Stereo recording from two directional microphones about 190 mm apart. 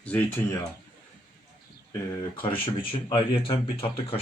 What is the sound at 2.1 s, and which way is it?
Speech, 25° left (ahead or behind).